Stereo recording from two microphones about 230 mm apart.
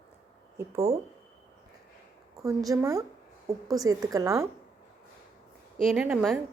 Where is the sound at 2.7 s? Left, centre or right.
Centre.